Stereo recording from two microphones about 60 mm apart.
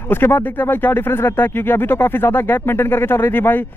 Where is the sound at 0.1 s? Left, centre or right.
Left.